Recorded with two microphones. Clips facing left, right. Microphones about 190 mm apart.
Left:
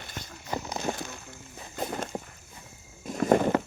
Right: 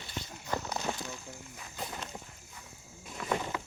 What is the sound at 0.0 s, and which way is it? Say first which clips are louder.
Walk: even; 50° left (ahead or behind).